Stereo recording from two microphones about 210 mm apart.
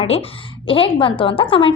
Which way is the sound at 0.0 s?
25° left (ahead or behind).